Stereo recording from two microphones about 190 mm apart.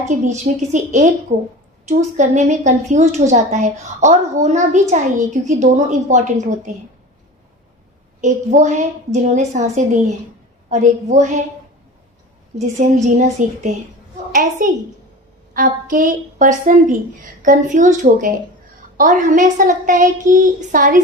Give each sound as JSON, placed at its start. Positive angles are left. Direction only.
{"t": 0.1, "sound": "a woman's voice", "side_deg": -40}
{"t": 8.2, "sound": "a woman's voice", "side_deg": -40}
{"t": 12.5, "sound": "a woman's voice", "side_deg": -40}